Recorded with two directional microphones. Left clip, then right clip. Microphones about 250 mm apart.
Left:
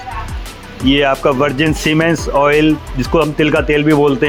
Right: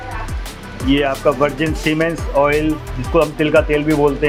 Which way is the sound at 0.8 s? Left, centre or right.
Left.